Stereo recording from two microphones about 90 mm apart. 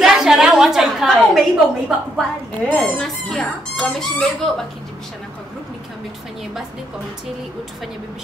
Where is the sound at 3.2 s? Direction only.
Centre (ahead or behind).